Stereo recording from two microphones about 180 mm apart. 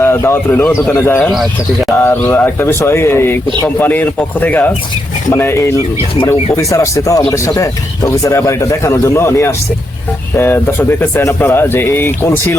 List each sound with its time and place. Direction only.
0.0 s speech: 15° left (ahead or behind)
1.3 s speech: centre (ahead or behind)
2.0 s speech: 15° left (ahead or behind)